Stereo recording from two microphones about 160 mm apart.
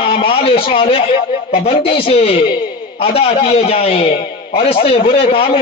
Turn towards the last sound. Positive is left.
turn(degrees=35)  # may be behind; listen again after turning